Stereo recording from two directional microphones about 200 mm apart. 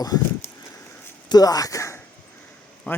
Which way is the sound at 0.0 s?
20° left (ahead or behind).